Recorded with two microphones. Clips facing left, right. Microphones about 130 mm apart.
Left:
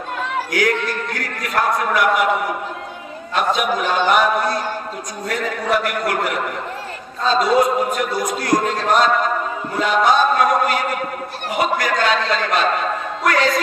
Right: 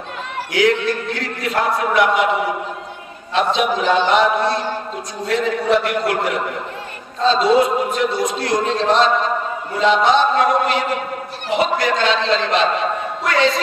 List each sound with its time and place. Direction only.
0.5 s a man's voice: 25° right (ahead or behind)
3.3 s a man's voice: 25° right (ahead or behind)